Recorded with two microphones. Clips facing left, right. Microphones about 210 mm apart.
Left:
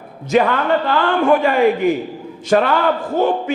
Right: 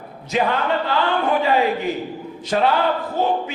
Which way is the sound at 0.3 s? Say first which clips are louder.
Left 5 dB; 50° left (ahead or behind).